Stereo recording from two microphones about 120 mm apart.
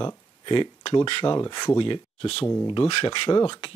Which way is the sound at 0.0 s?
45° left (ahead or behind).